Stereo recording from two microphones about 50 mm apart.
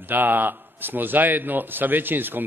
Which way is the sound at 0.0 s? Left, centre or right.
Right.